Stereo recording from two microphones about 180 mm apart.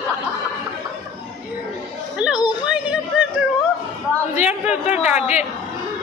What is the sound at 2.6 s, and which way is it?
Yodeling, 5° right (ahead or behind).